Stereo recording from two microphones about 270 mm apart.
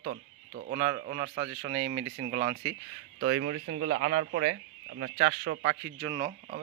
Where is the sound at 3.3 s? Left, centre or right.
Right.